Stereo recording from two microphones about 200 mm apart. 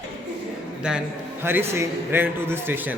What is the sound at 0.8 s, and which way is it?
A man's voice, 5° right (ahead or behind).